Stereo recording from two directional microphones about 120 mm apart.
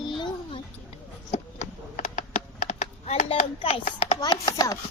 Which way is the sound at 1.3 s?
90° left.